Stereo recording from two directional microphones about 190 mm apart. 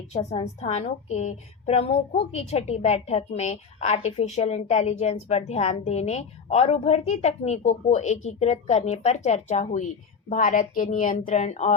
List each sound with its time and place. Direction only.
0.1 s a woman's voice: 35° left (ahead or behind)